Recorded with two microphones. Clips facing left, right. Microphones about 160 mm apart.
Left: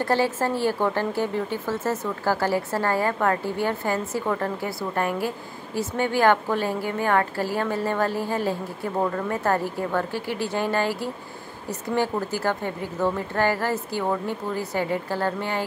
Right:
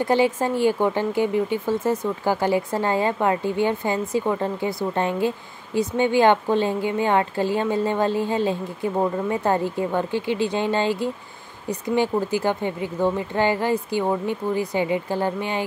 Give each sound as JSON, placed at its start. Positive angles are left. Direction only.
{"t": 0.0, "sound": "a woman's voice", "side_deg": -15}